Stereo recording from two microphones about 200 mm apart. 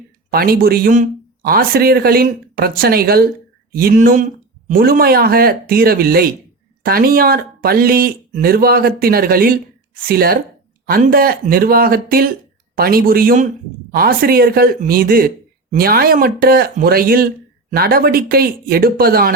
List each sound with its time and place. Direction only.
0.3 s speech: 50° right (ahead or behind)